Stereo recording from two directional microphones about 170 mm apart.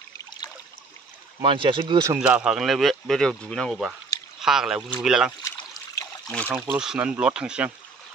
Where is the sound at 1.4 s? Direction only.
30° right (ahead or behind).